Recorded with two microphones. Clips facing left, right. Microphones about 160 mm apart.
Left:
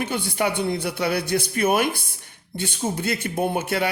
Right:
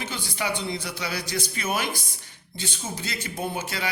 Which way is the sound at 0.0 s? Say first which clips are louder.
Left 7 dB; 55° left (ahead or behind).